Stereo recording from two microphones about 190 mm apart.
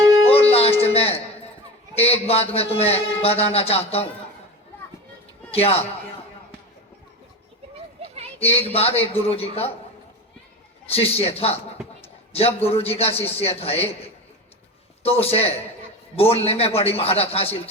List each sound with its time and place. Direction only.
0.3 s music: 30° left (ahead or behind)
2.0 s a man's voice: 30° left (ahead or behind)
5.5 s a man's voice: 30° left (ahead or behind)
8.4 s a man's voice: 30° left (ahead or behind)
10.9 s a man's voice: 30° left (ahead or behind)